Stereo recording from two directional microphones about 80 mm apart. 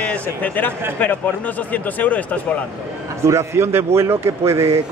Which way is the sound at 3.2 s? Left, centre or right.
Right.